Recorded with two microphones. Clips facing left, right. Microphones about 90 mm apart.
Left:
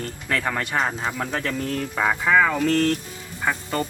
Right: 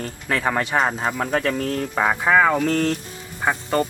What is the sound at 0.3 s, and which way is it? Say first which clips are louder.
Speech: right 4 dB; 25° right (ahead or behind).